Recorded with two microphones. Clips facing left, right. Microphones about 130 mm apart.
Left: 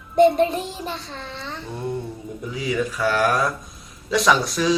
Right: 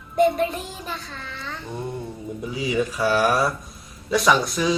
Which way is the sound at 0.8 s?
25° left (ahead or behind).